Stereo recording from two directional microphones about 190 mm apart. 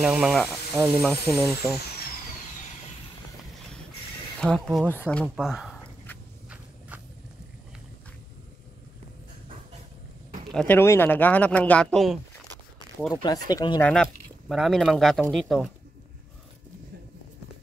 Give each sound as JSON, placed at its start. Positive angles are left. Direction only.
{"t": 0.0, "sound": "speech", "side_deg": -5}
{"t": 4.4, "sound": "speech", "side_deg": 5}
{"t": 10.5, "sound": "speech", "side_deg": 10}
{"t": 13.1, "sound": "speech", "side_deg": 20}
{"t": 14.0, "sound": "speech", "side_deg": 0}